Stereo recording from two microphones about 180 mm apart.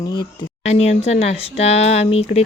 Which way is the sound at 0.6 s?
35° left (ahead or behind).